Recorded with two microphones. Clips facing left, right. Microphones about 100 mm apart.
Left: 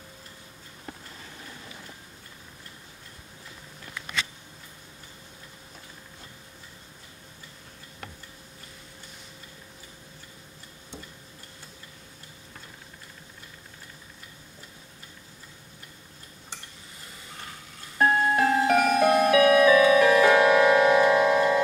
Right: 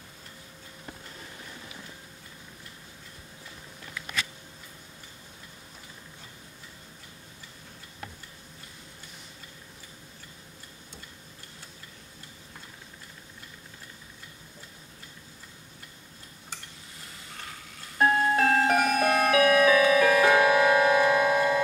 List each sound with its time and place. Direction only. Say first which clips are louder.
17.9 s music: left 1 dB; 25° left (ahead or behind)
18.4 s music: even; 10° left (ahead or behind)
18.8 s music: left 3 dB; 35° left (ahead or behind)